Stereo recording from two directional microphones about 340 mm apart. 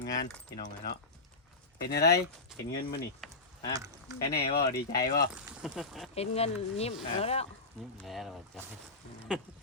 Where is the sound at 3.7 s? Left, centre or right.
Centre.